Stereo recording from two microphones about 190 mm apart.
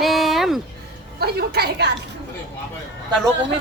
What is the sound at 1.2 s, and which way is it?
Speech, 55° right (ahead or behind).